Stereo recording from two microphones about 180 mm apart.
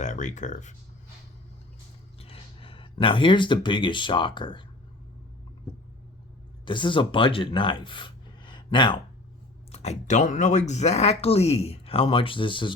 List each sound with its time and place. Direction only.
0.0 s speech: 40° left (ahead or behind)
2.1 s speech: 30° left (ahead or behind)
6.7 s speech: 25° left (ahead or behind)
9.7 s speech: 40° left (ahead or behind)